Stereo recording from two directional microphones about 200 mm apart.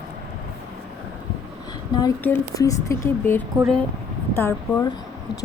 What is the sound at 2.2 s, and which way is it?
Speech, 15° left (ahead or behind).